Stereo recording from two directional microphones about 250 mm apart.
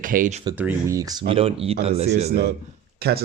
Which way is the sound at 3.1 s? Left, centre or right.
Right.